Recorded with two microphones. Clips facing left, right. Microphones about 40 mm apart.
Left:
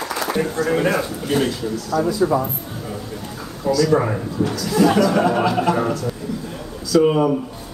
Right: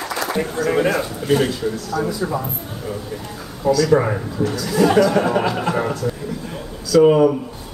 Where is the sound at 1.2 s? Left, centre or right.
Centre.